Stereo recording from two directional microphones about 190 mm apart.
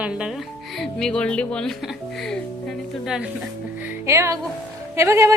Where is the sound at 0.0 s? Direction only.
5° right (ahead or behind).